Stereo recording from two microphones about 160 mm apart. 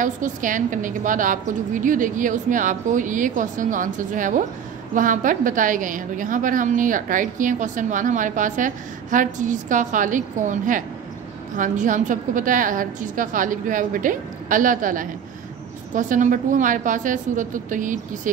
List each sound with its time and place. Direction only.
0.0 s a woman's voice: 55° right (ahead or behind)